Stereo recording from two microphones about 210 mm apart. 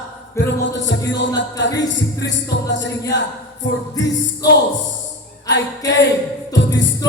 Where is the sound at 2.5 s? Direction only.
55° left (ahead or behind).